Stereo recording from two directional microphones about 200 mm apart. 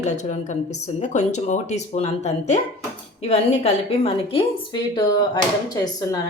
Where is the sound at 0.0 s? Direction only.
35° left (ahead or behind).